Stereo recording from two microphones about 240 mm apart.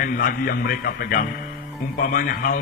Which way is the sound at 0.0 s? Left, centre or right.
Left.